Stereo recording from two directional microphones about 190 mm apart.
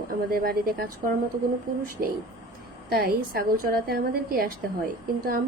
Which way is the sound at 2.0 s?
50° right (ahead or behind).